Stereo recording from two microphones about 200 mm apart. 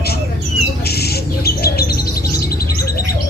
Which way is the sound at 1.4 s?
50° left (ahead or behind).